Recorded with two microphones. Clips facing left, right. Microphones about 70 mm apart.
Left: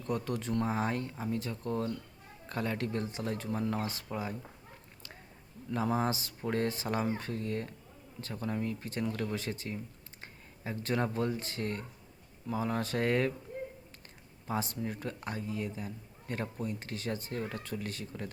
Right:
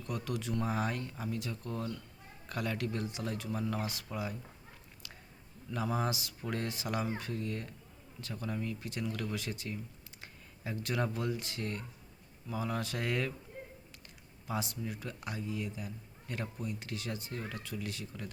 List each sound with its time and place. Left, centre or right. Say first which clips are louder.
0.0 s speech: left 4 dB; left
5.7 s speech: left 3 dB; left
14.4 s speech: left 3 dB; left